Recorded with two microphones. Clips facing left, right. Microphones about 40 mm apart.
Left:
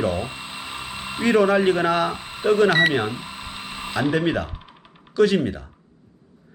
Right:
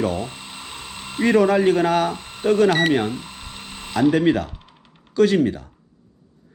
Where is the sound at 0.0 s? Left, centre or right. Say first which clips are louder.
Even; centre.